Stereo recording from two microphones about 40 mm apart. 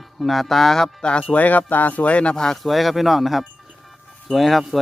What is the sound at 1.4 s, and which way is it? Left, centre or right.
Speech, left.